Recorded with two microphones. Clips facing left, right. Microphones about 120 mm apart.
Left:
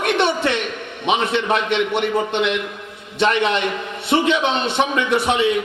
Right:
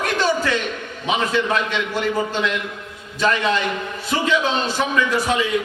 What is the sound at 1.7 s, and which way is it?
A man's voice, 25° left (ahead or behind).